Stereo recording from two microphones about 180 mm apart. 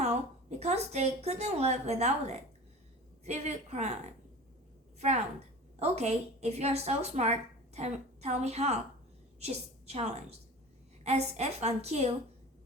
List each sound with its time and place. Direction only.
0.6 s a woman's voice: 35° right (ahead or behind)